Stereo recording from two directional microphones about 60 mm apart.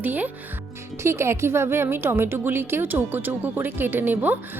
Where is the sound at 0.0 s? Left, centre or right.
Right.